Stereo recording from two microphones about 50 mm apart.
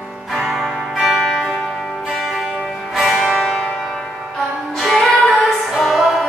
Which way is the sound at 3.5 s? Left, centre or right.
Left.